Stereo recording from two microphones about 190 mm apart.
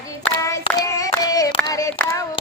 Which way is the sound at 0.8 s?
20° left (ahead or behind).